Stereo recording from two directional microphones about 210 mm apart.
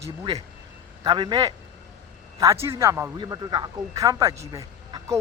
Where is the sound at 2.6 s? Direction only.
15° right (ahead or behind).